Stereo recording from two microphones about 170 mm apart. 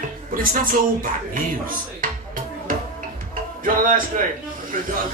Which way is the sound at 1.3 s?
55° right (ahead or behind).